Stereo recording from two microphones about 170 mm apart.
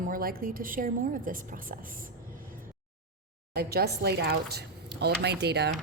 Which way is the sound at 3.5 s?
65° right (ahead or behind).